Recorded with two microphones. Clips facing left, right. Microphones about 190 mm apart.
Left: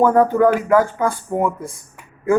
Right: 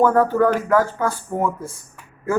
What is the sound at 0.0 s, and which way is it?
Speech, 15° left (ahead or behind).